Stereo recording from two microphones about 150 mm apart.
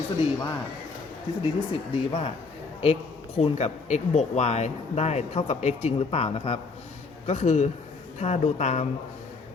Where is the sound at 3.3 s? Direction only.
45° left (ahead or behind).